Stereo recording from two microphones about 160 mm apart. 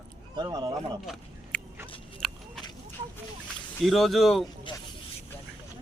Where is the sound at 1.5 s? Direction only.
5° left (ahead or behind).